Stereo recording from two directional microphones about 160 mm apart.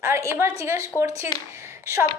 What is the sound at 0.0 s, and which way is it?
A woman's voice, 15° right (ahead or behind).